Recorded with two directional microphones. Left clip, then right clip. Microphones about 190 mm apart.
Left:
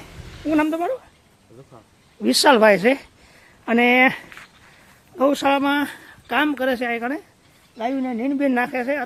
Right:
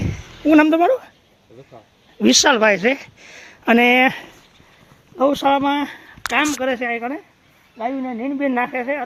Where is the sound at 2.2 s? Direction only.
40° right (ahead or behind).